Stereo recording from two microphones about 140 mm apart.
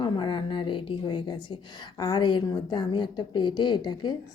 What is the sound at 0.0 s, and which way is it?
A woman's voice, 35° left (ahead or behind).